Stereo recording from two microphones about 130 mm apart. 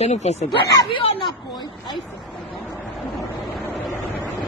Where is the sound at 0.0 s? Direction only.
60° left (ahead or behind).